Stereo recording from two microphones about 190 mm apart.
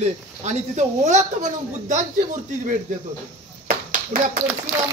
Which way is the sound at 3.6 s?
45° right (ahead or behind).